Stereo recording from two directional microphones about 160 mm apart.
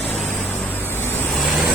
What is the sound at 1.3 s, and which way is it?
Vehicle, centre (ahead or behind).